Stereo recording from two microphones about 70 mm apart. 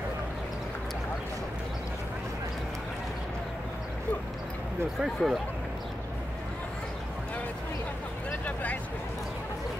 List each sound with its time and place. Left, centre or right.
5.0 s speech: centre
8.3 s vehicle: left